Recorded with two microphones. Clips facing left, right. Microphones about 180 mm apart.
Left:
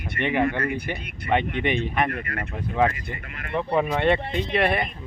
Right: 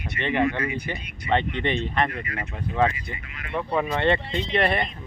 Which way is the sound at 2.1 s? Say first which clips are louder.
Left 2 dB; 55° left (ahead or behind).